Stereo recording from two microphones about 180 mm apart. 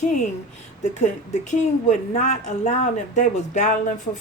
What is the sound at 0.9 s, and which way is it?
A woman's voice, 40° left (ahead or behind).